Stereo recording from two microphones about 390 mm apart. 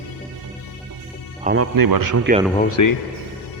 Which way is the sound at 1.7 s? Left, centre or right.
Right.